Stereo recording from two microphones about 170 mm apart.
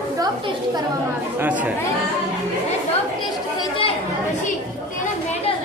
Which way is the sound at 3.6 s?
30° left (ahead or behind).